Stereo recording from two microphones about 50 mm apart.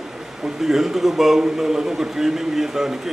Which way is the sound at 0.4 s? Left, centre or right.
Centre.